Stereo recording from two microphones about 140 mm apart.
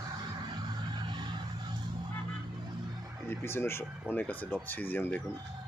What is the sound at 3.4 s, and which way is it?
Speech, 15° left (ahead or behind).